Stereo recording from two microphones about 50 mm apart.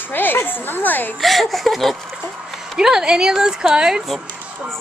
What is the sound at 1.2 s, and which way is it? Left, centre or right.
Speech, centre.